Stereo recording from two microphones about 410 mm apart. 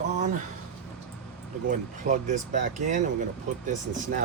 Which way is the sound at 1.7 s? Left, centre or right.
Centre.